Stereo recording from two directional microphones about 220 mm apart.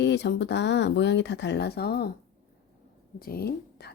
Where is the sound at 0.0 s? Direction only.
50° left (ahead or behind).